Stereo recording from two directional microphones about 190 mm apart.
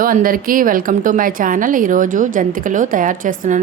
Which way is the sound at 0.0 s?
45° right (ahead or behind).